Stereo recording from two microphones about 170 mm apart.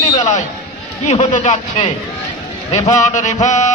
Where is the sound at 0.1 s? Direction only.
40° left (ahead or behind).